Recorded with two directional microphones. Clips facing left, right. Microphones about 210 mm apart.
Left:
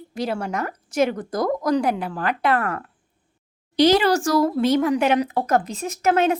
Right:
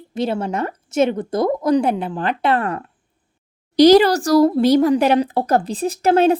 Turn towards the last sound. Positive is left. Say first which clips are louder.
# right 5 dB
turn(degrees=-35)  # may be behind; listen again after turning